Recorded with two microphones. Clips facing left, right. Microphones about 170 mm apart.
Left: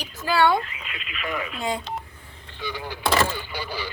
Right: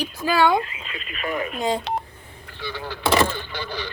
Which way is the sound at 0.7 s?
30° right (ahead or behind).